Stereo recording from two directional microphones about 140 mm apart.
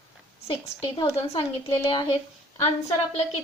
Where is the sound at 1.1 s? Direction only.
45° left (ahead or behind).